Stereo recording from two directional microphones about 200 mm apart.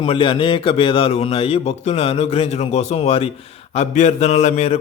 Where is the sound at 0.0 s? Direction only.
25° left (ahead or behind).